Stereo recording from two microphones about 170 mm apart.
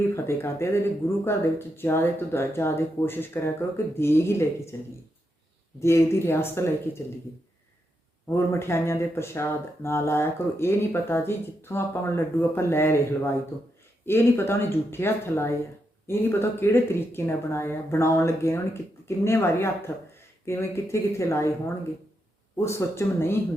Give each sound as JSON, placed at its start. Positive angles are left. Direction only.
{"t": 0.1, "sound": "speech", "side_deg": 15}
{"t": 5.8, "sound": "speech", "side_deg": 15}
{"t": 8.3, "sound": "speech", "side_deg": 15}
{"t": 22.5, "sound": "speech", "side_deg": 15}